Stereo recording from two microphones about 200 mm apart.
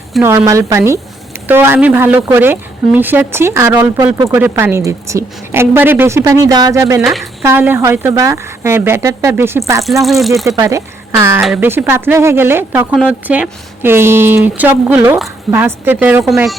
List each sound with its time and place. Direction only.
0.2 s speech: 15° right (ahead or behind)
7.0 s speech: centre (ahead or behind)
7.4 s speech: 10° right (ahead or behind)
9.8 s speech: centre (ahead or behind)
10.4 s speech: 15° right (ahead or behind)